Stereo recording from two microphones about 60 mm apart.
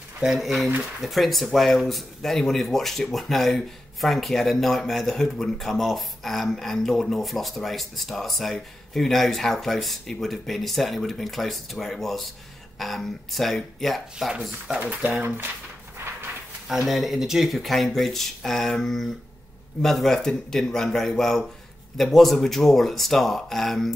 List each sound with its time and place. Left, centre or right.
0.2 s speech: centre
14.8 s speech: right
15.2 s speech: right
16.6 s speech: centre